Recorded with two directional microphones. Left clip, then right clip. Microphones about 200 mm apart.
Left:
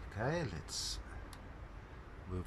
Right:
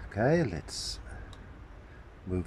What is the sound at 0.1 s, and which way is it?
Speech, 40° right (ahead or behind).